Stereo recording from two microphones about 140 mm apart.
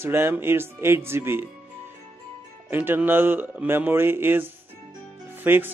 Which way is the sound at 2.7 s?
15° right (ahead or behind).